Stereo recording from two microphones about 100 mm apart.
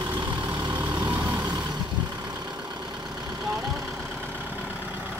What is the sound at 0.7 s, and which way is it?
Vehicle, 15° right (ahead or behind).